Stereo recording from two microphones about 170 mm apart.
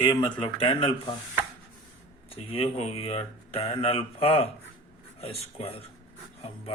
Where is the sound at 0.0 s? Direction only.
25° left (ahead or behind).